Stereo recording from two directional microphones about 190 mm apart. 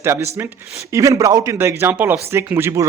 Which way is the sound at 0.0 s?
15° right (ahead or behind).